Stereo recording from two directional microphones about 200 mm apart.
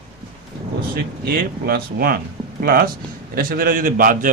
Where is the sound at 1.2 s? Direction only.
50° right (ahead or behind).